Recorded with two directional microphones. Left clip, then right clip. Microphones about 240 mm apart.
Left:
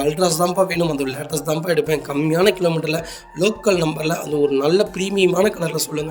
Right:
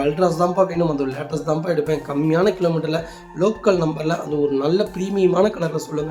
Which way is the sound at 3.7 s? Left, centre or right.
Left.